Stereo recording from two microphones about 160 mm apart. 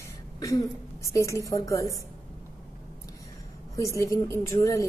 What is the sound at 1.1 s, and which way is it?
Speech, 20° left (ahead or behind).